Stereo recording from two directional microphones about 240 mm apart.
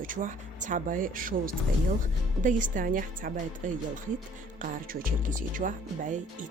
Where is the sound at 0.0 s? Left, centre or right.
Right.